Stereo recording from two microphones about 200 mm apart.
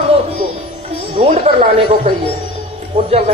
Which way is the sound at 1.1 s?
30° right (ahead or behind).